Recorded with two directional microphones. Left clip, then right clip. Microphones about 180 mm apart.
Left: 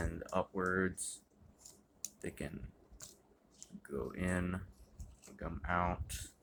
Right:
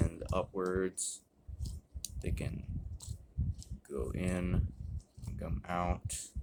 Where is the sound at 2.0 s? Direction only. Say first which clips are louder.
Right 1 dB; 20° right (ahead or behind).